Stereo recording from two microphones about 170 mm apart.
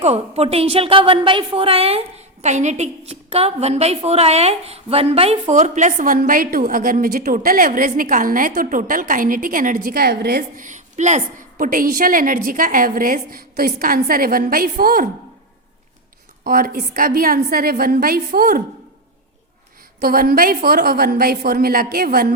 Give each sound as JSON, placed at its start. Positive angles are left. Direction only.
{"t": 0.0, "sound": "a woman's voice", "side_deg": -40}
{"t": 10.7, "sound": "a woman's voice", "side_deg": -45}
{"t": 16.4, "sound": "a woman's voice", "side_deg": -60}
{"t": 20.0, "sound": "a woman's voice", "side_deg": -60}